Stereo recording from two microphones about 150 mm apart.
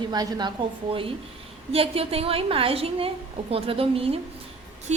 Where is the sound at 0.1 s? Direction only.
25° right (ahead or behind).